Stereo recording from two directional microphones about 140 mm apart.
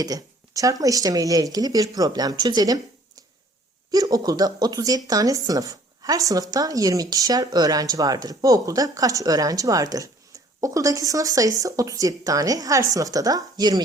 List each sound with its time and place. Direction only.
0.0 s speech: 25° right (ahead or behind)